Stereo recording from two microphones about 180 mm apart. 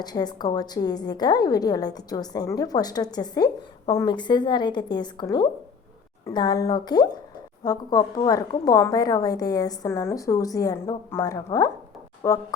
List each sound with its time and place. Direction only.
0.0 s a woman's voice: 20° left (ahead or behind)